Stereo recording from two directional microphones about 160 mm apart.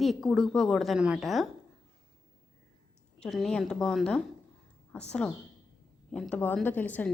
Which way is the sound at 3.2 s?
Centre (ahead or behind).